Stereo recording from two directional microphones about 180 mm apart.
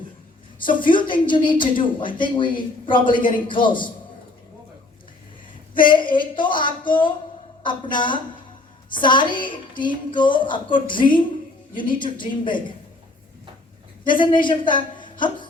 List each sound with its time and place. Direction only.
0.6 s a woman's voice: 25° left (ahead or behind)
5.9 s a woman's voice: 25° left (ahead or behind)
14.1 s a woman's voice: 25° left (ahead or behind)